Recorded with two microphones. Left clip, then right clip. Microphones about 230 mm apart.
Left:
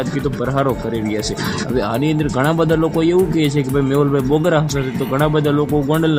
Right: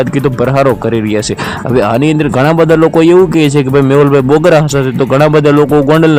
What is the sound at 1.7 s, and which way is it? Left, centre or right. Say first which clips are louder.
Speech: right 10 dB; right.